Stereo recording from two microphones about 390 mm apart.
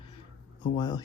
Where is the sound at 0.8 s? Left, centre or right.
Centre.